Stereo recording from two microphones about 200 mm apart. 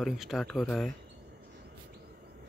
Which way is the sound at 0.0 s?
Centre (ahead or behind).